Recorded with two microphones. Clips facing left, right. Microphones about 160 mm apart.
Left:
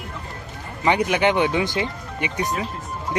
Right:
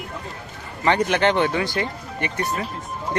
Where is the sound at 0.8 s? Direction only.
10° left (ahead or behind).